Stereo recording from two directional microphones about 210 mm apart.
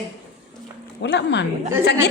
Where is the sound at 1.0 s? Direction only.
55° left (ahead or behind).